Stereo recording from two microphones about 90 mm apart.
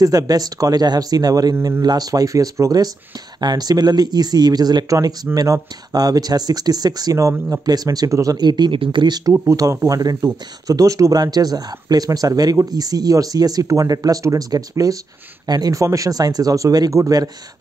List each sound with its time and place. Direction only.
0.0 s speech: 45° right (ahead or behind)
7.6 s speech: 45° right (ahead or behind)
8.4 s speech: 55° right (ahead or behind)
9.3 s speech: 35° right (ahead or behind)